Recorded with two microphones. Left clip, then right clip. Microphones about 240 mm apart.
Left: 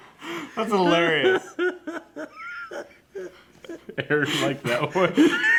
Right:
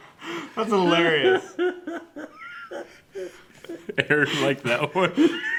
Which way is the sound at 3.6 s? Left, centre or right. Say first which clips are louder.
Right 1 dB; right.